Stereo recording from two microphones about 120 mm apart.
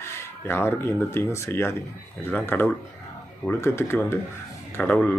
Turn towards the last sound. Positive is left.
turn(degrees=10)  # may be behind; listen again after turning